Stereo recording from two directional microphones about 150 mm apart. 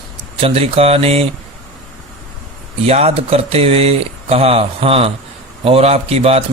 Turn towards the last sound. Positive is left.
turn(degrees=-40)  # may be behind; listen again after turning